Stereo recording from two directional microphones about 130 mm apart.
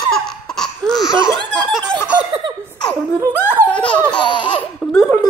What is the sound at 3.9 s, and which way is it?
Laughter, 10° left (ahead or behind).